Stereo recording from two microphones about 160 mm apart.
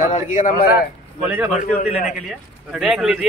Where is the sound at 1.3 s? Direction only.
10° right (ahead or behind).